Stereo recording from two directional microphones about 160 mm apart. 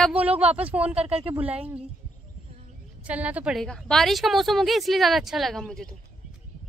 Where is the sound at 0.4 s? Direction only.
40° right (ahead or behind).